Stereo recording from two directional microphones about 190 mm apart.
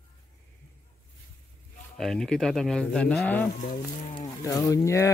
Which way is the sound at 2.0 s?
5° left (ahead or behind).